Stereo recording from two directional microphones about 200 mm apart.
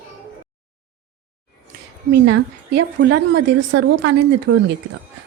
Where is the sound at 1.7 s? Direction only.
55° right (ahead or behind).